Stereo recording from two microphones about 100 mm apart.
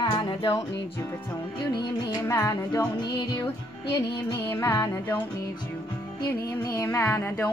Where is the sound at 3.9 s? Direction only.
20° left (ahead or behind).